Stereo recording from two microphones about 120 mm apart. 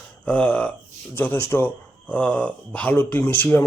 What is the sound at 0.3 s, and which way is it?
Speech, 10° left (ahead or behind).